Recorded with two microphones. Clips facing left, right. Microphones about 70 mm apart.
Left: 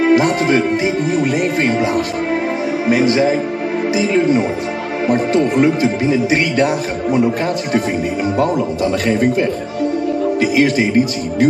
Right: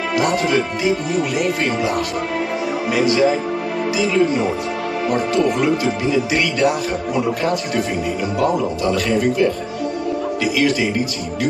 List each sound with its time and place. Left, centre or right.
0.0 s speech: left
5.0 s speech: left
9.0 s speech: left